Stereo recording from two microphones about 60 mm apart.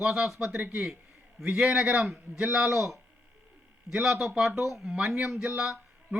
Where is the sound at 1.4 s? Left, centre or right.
Centre.